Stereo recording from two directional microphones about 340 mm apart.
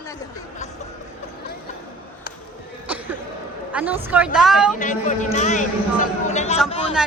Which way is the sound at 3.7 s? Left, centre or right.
Centre.